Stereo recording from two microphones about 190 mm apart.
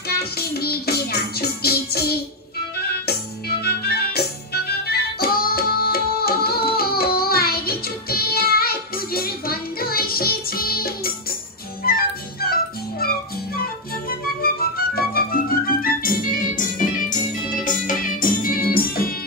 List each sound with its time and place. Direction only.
0.1 s music: 55° left (ahead or behind)
14.4 s music: 50° left (ahead or behind)